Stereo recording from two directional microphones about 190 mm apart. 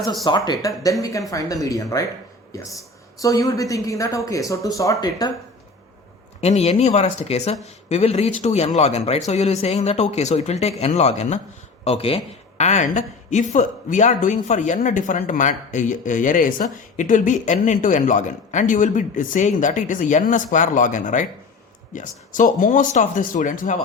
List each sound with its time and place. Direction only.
0.0 s speech: centre (ahead or behind)
0.3 s a woman's voice: 20° left (ahead or behind)
3.2 s a woman's voice: 15° left (ahead or behind)
6.4 s a woman's voice: 35° left (ahead or behind)